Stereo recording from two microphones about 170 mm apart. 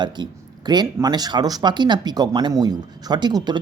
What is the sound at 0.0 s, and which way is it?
Speech, 25° right (ahead or behind).